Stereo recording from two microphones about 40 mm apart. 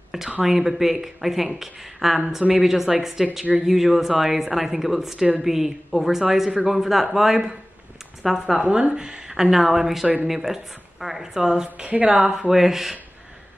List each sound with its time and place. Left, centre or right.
0.4 s speech: centre
8.5 s speech: centre
11.7 s speech: right
12.2 s speech: centre